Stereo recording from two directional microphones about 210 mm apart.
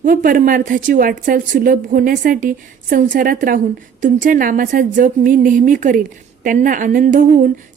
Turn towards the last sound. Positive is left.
turn(degrees=-40)  # may be behind; listen again after turning